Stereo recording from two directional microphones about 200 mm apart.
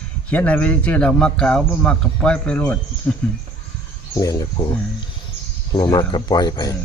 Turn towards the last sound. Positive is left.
turn(degrees=20)  # may be behind; listen again after turning